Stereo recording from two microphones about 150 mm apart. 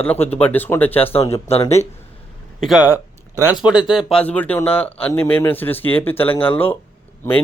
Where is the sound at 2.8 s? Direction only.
15° right (ahead or behind).